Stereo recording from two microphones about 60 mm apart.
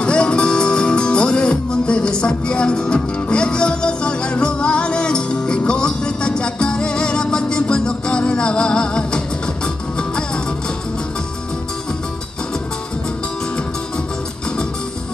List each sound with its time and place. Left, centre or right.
0.0 s music: centre